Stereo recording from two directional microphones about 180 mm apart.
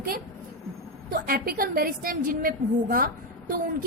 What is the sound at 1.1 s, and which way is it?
A woman's voice, 55° right (ahead or behind).